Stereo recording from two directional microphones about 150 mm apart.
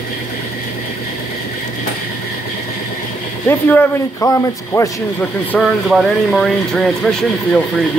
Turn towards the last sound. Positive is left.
turn(degrees=5)  # may be behind; listen again after turning